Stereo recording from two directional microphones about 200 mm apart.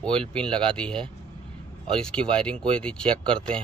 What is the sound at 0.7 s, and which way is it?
A man's voice, 5° left (ahead or behind).